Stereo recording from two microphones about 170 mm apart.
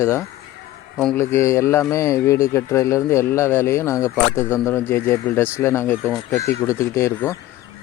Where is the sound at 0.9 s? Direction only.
Centre (ahead or behind).